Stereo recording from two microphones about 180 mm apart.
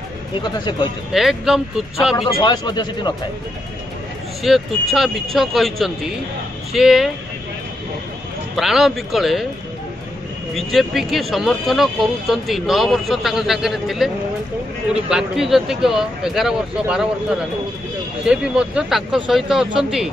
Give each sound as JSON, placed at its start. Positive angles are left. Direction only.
{"t": 0.4, "sound": "speech", "side_deg": 25}
{"t": 1.1, "sound": "speech", "side_deg": 0}
{"t": 2.4, "sound": "speech", "side_deg": 25}
{"t": 4.4, "sound": "speech", "side_deg": 0}
{"t": 8.5, "sound": "speech", "side_deg": 0}
{"t": 10.5, "sound": "speech", "side_deg": 0}
{"t": 18.2, "sound": "speech", "side_deg": -5}